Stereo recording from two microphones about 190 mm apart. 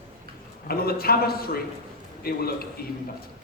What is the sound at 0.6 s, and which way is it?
A man's voice, 55° left (ahead or behind).